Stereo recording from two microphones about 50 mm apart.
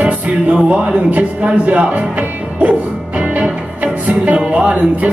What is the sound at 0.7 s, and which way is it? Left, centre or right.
Speech, right.